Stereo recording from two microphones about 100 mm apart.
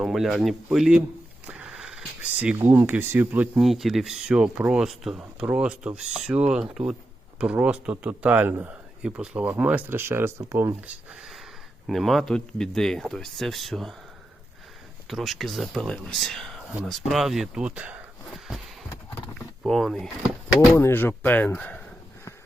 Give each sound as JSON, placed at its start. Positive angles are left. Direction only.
{"t": 0.0, "sound": "speech", "side_deg": 0}
{"t": 1.5, "sound": "a sound", "side_deg": -10}
{"t": 2.6, "sound": "speech", "side_deg": -20}
{"t": 3.6, "sound": "speech", "side_deg": 0}
{"t": 9.0, "sound": "speech", "side_deg": -10}
{"t": 11.1, "sound": "a sound", "side_deg": -5}
{"t": 11.9, "sound": "speech", "side_deg": 0}
{"t": 15.1, "sound": "speech", "side_deg": 0}
{"t": 19.6, "sound": "speech", "side_deg": 0}
{"t": 20.7, "sound": "speech", "side_deg": 25}